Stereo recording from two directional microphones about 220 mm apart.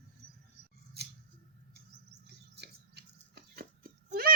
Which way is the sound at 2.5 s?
50° right (ahead or behind).